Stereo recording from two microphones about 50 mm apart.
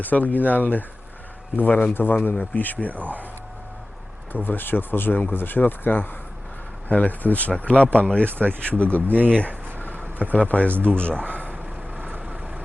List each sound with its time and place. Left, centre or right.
0.0 s speech: left
2.3 s speech: left
4.3 s speech: left
8.2 s speech: right
8.7 s speech: left
9.0 s speech: right
10.2 s speech: left
10.7 s speech: right
11.0 s speech: left